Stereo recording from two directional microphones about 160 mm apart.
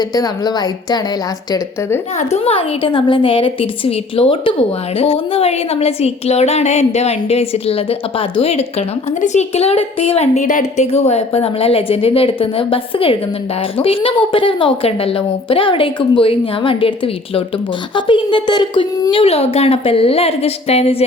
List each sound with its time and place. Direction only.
0.1 s a woman's voice: 25° left (ahead or behind)
2.1 s a woman's voice: 40° left (ahead or behind)